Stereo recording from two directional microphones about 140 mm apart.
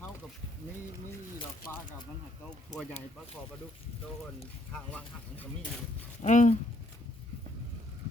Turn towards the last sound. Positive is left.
turn(degrees=60)  # may be behind; listen again after turning